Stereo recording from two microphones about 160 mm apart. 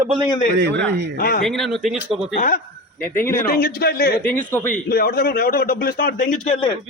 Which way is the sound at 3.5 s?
65° left (ahead or behind).